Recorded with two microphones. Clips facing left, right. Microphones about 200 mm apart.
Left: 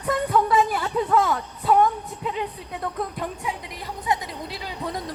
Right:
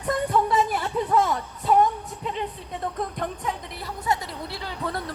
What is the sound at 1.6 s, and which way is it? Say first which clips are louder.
Music: left 1 dB; centre (ahead or behind).